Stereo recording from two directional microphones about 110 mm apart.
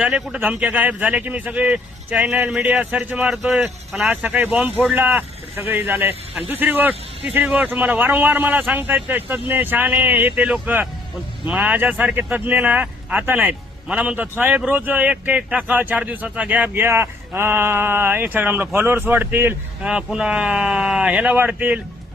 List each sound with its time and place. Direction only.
0.0 s speech: 10° right (ahead or behind)
3.2 s speech: 5° right (ahead or behind)
4.1 s speech: 15° right (ahead or behind)
19.9 s speech: 5° right (ahead or behind)